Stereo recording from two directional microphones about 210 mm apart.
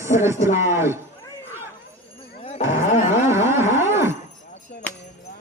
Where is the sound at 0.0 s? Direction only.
15° right (ahead or behind).